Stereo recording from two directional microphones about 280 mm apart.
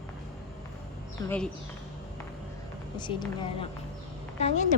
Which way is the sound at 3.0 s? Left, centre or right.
Centre.